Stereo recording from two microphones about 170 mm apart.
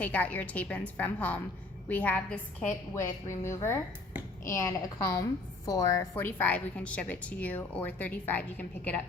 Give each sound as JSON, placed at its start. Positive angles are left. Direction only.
{"t": 0.0, "sound": "a woman's voice", "side_deg": 10}